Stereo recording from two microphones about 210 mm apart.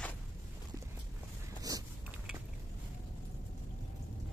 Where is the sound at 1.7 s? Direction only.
15° right (ahead or behind).